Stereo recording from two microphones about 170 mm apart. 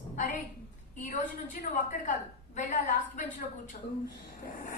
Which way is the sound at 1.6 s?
50° left (ahead or behind).